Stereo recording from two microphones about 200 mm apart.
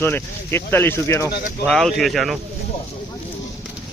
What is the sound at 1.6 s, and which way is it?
Speech, centre (ahead or behind).